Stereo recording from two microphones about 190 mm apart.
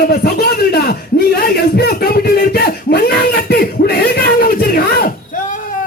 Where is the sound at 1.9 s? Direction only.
50° left (ahead or behind).